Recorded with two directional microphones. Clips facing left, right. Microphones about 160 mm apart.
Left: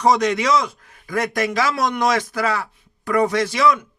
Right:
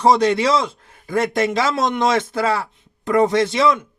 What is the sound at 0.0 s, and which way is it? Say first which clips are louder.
Speech: right 2 dB; 30° right (ahead or behind).